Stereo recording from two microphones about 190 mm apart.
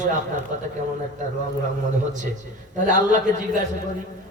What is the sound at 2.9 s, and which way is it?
Speech, 40° right (ahead or behind).